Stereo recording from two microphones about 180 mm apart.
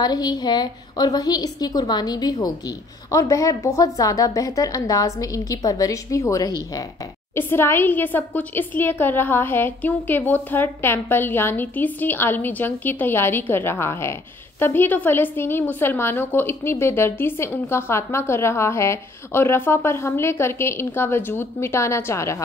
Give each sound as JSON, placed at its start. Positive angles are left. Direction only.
{"t": 0.0, "sound": "a woman's voice", "side_deg": 20}